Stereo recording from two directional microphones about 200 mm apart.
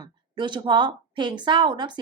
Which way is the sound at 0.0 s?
20° right (ahead or behind).